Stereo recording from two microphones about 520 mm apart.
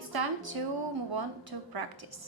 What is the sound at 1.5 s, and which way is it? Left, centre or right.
Speech, right.